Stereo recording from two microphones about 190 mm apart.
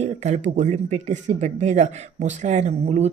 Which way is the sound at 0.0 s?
35° right (ahead or behind).